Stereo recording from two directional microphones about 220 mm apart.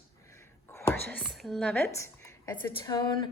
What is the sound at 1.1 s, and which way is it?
Speech, centre (ahead or behind).